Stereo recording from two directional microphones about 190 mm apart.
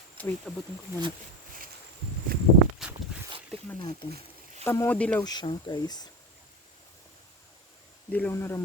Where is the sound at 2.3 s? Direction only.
50° right (ahead or behind).